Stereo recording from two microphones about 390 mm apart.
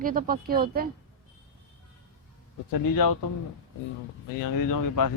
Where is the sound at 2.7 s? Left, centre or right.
Left.